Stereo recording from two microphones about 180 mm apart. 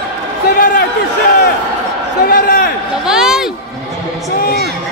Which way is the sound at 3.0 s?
5° right (ahead or behind).